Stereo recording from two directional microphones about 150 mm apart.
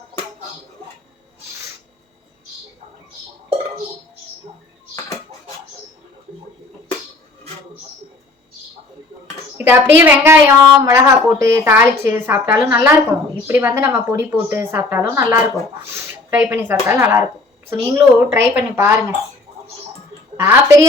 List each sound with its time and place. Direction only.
9.6 s a woman's voice: 15° right (ahead or behind)
20.3 s a woman's voice: 15° right (ahead or behind)